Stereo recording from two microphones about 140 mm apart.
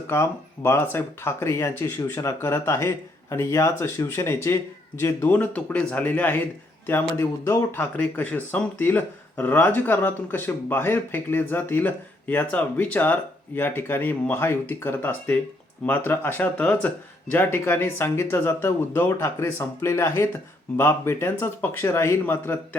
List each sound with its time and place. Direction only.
0.1 s speech: 20° left (ahead or behind)